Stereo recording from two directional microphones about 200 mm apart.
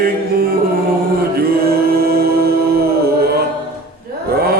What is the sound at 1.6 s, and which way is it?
Music, 50° right (ahead or behind).